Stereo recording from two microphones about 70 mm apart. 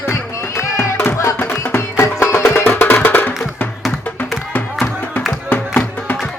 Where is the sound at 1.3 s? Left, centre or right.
Left.